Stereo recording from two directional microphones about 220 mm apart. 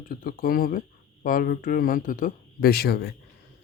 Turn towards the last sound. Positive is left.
turn(degrees=45)  # may be behind; listen again after turning